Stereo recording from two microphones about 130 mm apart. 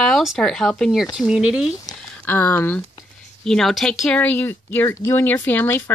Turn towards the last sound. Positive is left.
turn(degrees=15)  # may be behind; listen again after turning